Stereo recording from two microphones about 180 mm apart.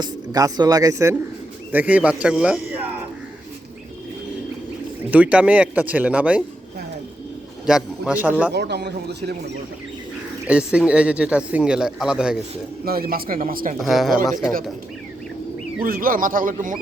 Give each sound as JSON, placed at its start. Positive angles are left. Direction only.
{"t": 0.0, "sound": "a man's voice", "side_deg": -20}
{"t": 5.1, "sound": "speech", "side_deg": -5}
{"t": 7.7, "sound": "a man's voice", "side_deg": -5}
{"t": 8.5, "sound": "a man's voice", "side_deg": -70}
{"t": 10.4, "sound": "speech", "side_deg": -5}
{"t": 12.8, "sound": "speech", "side_deg": -55}
{"t": 13.7, "sound": "speech", "side_deg": 0}
{"t": 15.8, "sound": "speech", "side_deg": -50}